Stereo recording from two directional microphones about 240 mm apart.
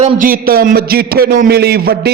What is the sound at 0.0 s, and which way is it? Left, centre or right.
A man's voice, right.